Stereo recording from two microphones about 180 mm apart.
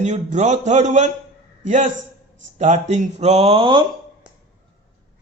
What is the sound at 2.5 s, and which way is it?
A man's voice, 40° right (ahead or behind).